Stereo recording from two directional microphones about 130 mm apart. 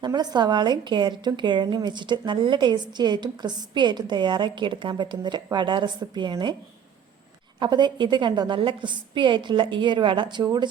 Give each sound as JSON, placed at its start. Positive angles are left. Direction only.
{"t": 0.0, "sound": "a woman's voice", "side_deg": -35}
{"t": 7.6, "sound": "a woman's voice", "side_deg": -35}